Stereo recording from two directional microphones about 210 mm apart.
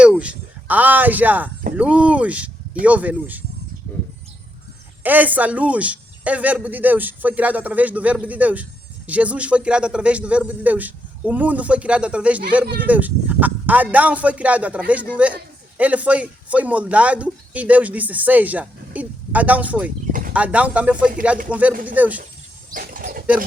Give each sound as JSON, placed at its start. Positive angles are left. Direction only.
{"t": 0.2, "sound": "a man's voice", "side_deg": -5}
{"t": 5.0, "sound": "a man's voice", "side_deg": -10}
{"t": 22.7, "sound": "speech", "side_deg": -40}